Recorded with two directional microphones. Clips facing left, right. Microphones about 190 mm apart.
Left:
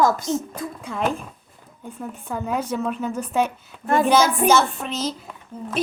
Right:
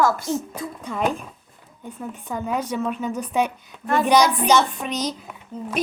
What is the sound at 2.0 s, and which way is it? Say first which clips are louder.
Speech: even; 5° left (ahead or behind).